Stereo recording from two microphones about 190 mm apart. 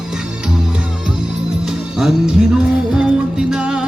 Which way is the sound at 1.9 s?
5° right (ahead or behind).